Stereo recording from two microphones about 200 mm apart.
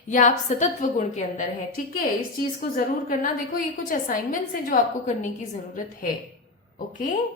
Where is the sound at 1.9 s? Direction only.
50° left (ahead or behind).